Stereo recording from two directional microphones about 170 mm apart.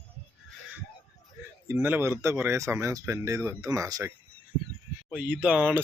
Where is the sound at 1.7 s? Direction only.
10° right (ahead or behind).